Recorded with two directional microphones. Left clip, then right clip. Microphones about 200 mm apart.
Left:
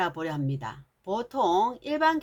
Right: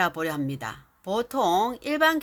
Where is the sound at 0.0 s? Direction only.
30° right (ahead or behind).